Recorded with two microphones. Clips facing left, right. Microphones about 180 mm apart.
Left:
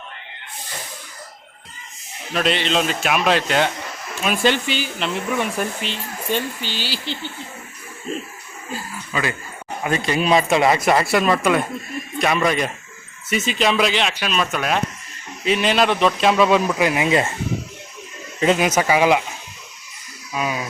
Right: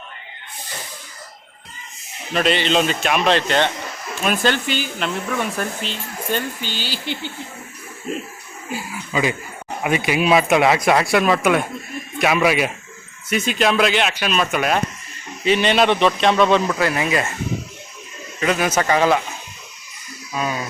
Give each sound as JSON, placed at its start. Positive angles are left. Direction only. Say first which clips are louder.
{"t": 2.3, "sound": "speech", "louder": "right 2 dB", "side_deg": 0}
{"t": 4.6, "sound": "speech", "louder": "right 1 dB", "side_deg": -45}
{"t": 4.9, "sound": "speech", "louder": "left 1 dB", "side_deg": 0}
{"t": 6.6, "sound": "speech", "louder": "even", "side_deg": -45}
{"t": 8.7, "sound": "speech", "louder": "right 3 dB", "side_deg": -15}
{"t": 18.3, "sound": "speech", "louder": "left 2 dB", "side_deg": 20}
{"t": 20.3, "sound": "speech", "louder": "even", "side_deg": 10}